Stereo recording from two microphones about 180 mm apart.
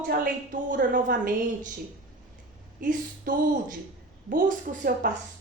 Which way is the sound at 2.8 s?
45° right (ahead or behind).